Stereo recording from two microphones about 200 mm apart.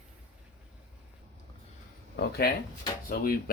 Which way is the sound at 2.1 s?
50° left (ahead or behind).